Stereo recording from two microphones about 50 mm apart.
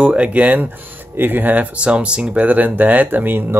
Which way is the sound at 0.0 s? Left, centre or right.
Right.